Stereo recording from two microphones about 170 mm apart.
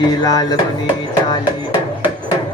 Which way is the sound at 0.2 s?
25° left (ahead or behind).